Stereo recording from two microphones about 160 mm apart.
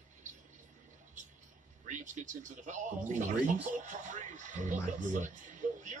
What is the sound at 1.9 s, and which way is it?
Speech, 50° right (ahead or behind).